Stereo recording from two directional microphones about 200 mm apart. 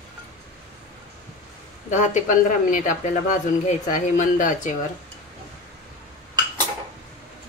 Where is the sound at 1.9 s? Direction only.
40° left (ahead or behind).